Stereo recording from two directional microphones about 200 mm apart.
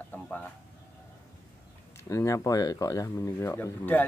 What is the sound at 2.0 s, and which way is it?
Speech, 15° left (ahead or behind).